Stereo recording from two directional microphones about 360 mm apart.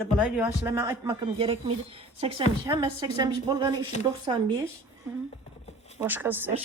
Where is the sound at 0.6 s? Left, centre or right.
Centre.